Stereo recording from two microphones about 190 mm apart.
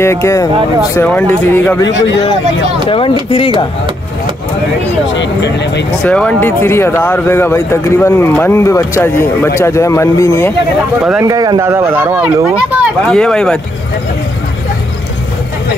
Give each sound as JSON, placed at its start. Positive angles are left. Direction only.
{"t": 0.0, "sound": "speech", "side_deg": 15}
{"t": 3.3, "sound": "speech", "side_deg": 30}
{"t": 5.0, "sound": "speech", "side_deg": 70}
{"t": 6.0, "sound": "speech", "side_deg": 5}
{"t": 11.2, "sound": "speech", "side_deg": -20}
{"t": 13.1, "sound": "speech", "side_deg": 5}